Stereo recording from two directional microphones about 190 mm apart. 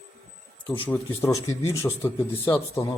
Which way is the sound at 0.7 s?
15° left (ahead or behind).